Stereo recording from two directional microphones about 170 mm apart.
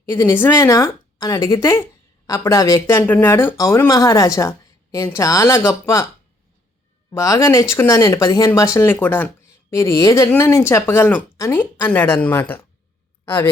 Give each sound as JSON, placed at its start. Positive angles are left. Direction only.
{"t": 0.0, "sound": "a woman's voice", "side_deg": 15}
{"t": 7.1, "sound": "a woman's voice", "side_deg": 20}